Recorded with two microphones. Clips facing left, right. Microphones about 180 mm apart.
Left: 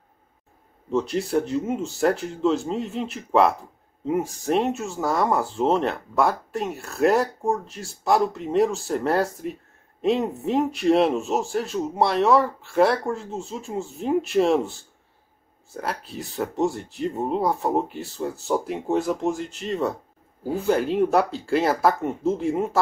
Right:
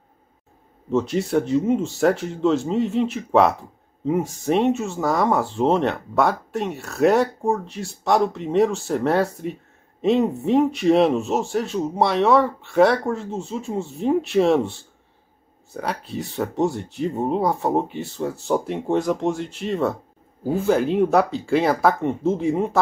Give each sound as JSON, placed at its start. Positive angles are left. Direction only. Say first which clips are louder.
{"t": 0.9, "sound": "speech", "louder": "right 2 dB", "side_deg": 0}